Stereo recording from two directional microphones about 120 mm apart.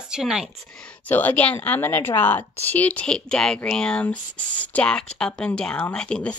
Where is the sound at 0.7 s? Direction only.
5° left (ahead or behind).